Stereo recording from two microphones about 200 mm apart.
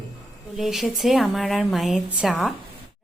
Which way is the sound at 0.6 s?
Centre (ahead or behind).